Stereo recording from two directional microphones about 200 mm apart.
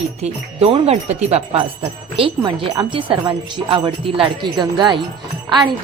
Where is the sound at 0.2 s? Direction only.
30° right (ahead or behind).